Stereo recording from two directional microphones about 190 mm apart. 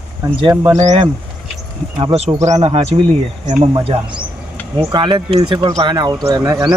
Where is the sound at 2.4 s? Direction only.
20° right (ahead or behind).